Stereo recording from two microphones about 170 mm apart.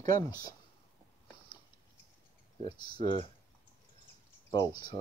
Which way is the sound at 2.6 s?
25° left (ahead or behind).